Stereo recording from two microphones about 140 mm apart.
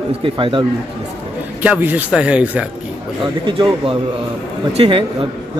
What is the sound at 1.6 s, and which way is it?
Speech, 10° right (ahead or behind).